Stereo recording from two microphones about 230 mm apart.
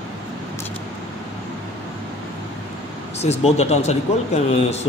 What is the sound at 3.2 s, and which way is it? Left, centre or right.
A man's voice, left.